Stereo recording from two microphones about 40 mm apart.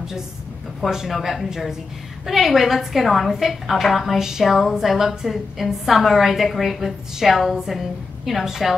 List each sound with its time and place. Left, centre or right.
0.7 s a woman's voice: centre